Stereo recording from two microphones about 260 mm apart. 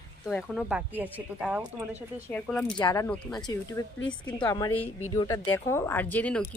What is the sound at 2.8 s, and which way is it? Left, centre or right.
Speech, centre.